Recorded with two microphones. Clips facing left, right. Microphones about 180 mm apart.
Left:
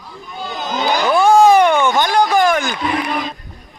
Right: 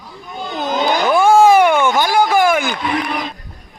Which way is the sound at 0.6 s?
55° right (ahead or behind).